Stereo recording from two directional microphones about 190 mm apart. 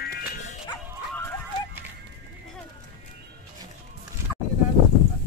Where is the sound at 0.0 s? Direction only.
55° left (ahead or behind).